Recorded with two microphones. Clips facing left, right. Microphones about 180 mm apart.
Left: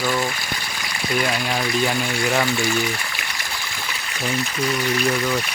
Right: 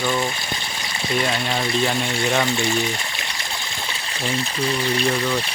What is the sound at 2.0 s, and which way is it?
Speech, 25° right (ahead or behind).